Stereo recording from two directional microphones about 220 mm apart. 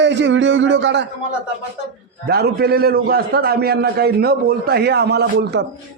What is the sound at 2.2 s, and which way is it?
A man's voice, 45° right (ahead or behind).